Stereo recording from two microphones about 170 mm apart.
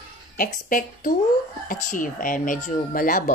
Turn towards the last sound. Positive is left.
turn(degrees=55)  # may be behind; listen again after turning